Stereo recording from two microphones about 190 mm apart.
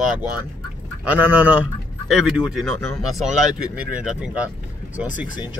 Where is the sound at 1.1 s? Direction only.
10° right (ahead or behind).